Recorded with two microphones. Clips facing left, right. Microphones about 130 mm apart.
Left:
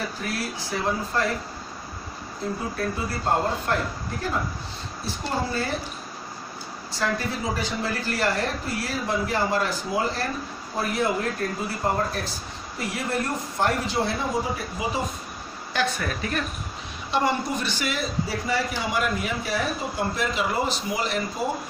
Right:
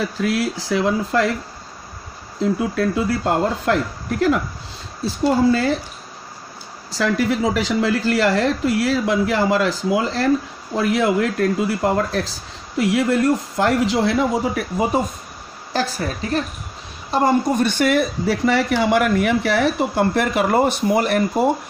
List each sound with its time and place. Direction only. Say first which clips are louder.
0.2 s speech: right 10 dB; 90° right
2.7 s speech: right 9 dB; 90° right
6.9 s speech: right 8 dB; 90° right
15.7 s speech: right 4 dB; 35° right (ahead or behind)
17.1 s speech: right 7 dB; 45° right (ahead or behind)